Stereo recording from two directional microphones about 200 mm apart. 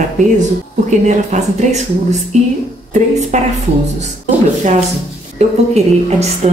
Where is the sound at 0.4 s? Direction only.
35° right (ahead or behind).